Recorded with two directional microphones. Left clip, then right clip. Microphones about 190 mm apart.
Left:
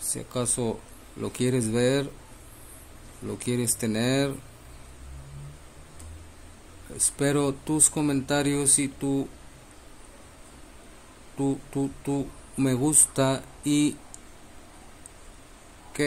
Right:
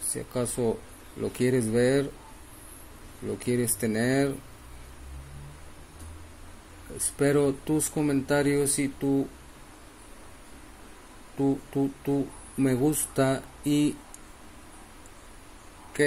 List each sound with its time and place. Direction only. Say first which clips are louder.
0.3 s speech: right 1 dB; 30° left (ahead or behind)
3.3 s speech: right 1 dB; 30° left (ahead or behind)
7.2 s speech: right 2 dB; 30° left (ahead or behind)
11.3 s music: right 1 dB; 25° left (ahead or behind)
12.6 s speech: right 1 dB; 30° left (ahead or behind)
13.2 s a sound: even; 30° left (ahead or behind)